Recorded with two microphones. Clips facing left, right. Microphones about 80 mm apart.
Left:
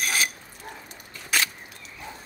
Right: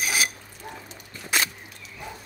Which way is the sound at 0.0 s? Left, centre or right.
Centre.